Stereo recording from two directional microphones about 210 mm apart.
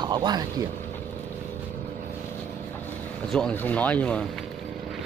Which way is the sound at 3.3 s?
5° left (ahead or behind).